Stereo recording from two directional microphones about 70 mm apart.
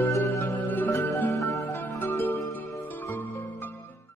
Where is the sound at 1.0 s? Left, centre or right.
Left.